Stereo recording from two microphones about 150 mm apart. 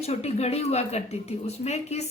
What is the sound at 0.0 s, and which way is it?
A woman's voice, 45° left (ahead or behind).